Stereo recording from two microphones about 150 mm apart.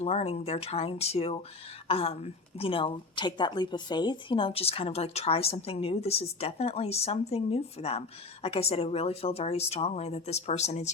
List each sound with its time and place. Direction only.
0.0 s a woman's voice: 45° left (ahead or behind)